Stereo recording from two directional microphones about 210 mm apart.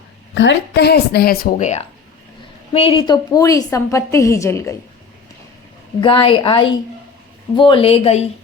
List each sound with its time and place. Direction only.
0.3 s a woman's voice: 55° left (ahead or behind); by 4.7 s 15° left (ahead or behind)
6.0 s a woman's voice: 25° left (ahead or behind)